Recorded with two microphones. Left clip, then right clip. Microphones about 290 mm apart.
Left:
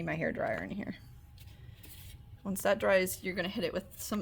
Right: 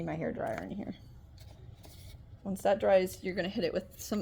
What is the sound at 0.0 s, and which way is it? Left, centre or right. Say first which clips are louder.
Speech: left 2 dB; left.